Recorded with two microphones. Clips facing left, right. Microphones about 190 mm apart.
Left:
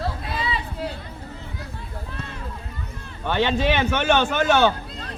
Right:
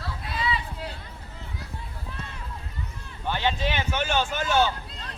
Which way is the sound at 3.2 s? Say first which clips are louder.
Left 6 dB; 70° left (ahead or behind).